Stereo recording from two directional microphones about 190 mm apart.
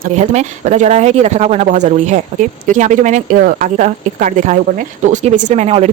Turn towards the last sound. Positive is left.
turn(degrees=-35)  # may be behind; listen again after turning